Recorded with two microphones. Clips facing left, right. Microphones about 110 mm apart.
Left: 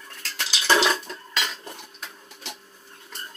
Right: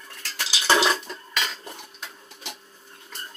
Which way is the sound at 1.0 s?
10° right (ahead or behind).